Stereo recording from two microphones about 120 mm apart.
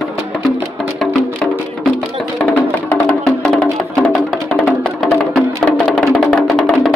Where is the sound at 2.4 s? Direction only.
10° left (ahead or behind).